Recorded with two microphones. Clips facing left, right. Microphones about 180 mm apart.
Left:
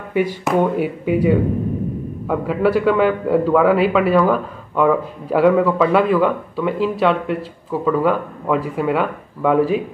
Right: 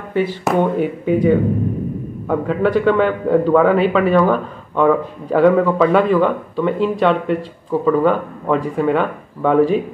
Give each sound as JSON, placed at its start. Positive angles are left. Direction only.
{"t": 0.1, "sound": "a man's voice", "side_deg": 10}